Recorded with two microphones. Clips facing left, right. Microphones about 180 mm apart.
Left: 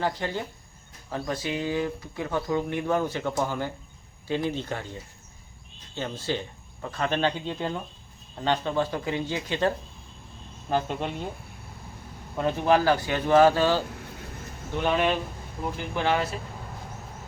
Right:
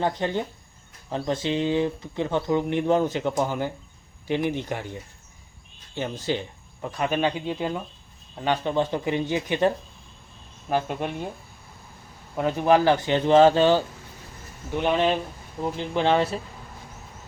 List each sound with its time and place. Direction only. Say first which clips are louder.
0.0 s speech: right 3 dB; 20° right (ahead or behind)
12.4 s speech: right 2 dB; 15° right (ahead or behind)